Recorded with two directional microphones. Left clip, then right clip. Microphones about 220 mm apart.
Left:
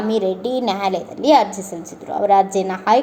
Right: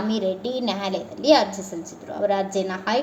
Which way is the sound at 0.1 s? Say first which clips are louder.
Left 7 dB; 25° left (ahead or behind).